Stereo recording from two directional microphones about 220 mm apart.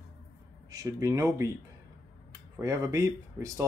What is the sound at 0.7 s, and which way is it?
Speech, 15° right (ahead or behind).